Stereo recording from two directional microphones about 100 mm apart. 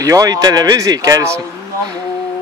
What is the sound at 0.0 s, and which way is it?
Speech, 35° right (ahead or behind).